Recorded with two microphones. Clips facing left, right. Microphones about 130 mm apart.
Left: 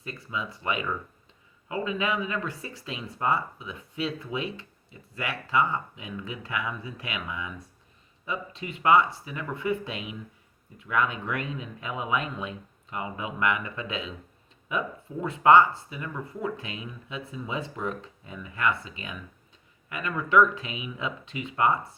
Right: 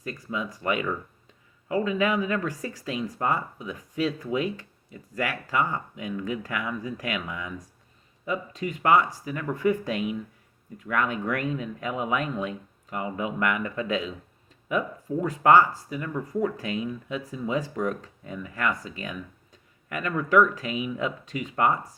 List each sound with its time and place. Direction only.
0.0 s speech: 45° right (ahead or behind)